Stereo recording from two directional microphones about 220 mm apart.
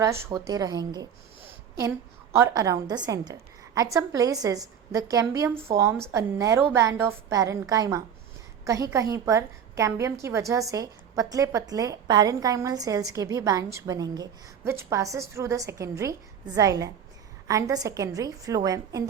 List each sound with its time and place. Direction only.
0.0 s a woman's voice: 10° right (ahead or behind)
2.4 s a woman's voice: 15° right (ahead or behind)